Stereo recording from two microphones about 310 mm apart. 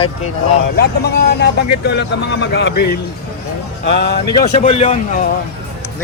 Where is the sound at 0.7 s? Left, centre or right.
Left.